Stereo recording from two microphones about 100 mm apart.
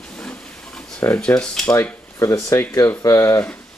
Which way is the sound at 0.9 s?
20° left (ahead or behind).